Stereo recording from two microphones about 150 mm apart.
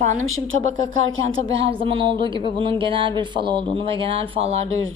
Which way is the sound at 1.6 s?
35° right (ahead or behind).